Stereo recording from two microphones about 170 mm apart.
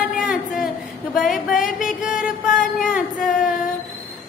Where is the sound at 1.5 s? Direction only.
50° left (ahead or behind).